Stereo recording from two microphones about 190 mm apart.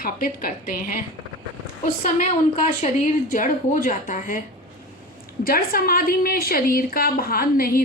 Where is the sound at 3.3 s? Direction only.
45° left (ahead or behind).